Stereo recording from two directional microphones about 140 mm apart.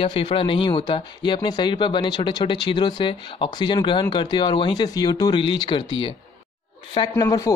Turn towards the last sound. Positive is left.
turn(degrees=25)  # may be behind; listen again after turning